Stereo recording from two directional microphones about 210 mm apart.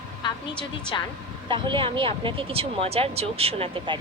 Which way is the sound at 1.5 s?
25° right (ahead or behind).